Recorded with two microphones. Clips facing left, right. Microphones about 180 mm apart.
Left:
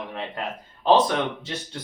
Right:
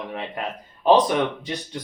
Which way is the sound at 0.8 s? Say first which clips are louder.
Right 2 dB; 15° right (ahead or behind).